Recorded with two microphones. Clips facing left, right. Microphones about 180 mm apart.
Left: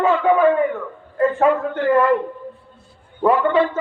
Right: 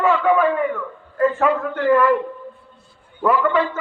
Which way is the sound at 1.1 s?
30° left (ahead or behind).